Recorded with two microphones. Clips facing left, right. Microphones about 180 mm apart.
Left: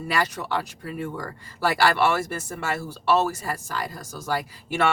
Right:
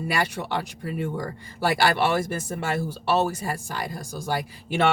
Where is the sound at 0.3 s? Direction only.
20° right (ahead or behind).